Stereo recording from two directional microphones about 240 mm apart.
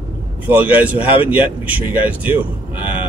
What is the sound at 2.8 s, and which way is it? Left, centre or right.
Speech, left.